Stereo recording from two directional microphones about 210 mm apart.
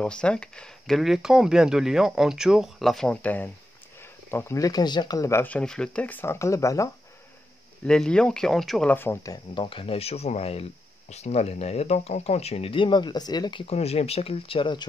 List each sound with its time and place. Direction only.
0.0 s speech: 5° left (ahead or behind)
7.8 s speech: 5° left (ahead or behind); by 14.9 s 20° left (ahead or behind)